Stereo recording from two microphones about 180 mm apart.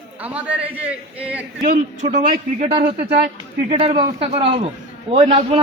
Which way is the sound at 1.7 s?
55° right (ahead or behind).